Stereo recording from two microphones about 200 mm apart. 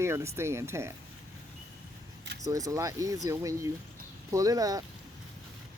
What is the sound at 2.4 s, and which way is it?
Speech, 15° right (ahead or behind).